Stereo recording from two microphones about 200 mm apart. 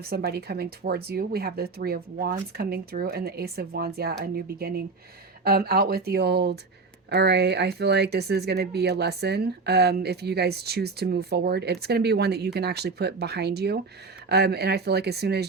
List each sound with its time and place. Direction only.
0.0 s speech: 50° right (ahead or behind)